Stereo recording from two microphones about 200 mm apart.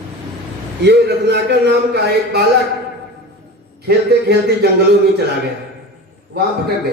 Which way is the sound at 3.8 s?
55° right (ahead or behind).